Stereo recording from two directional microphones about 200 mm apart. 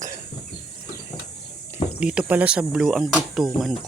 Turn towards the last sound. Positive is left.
turn(degrees=0)  # may be behind; listen again after turning